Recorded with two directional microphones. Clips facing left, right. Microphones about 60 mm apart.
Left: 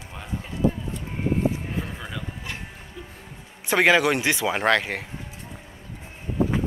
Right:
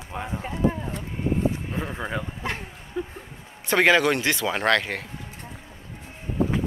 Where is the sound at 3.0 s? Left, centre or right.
Right.